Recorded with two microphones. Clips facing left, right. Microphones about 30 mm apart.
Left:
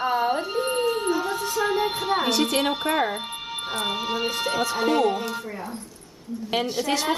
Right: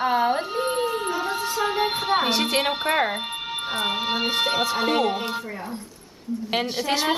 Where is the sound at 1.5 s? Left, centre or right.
Right.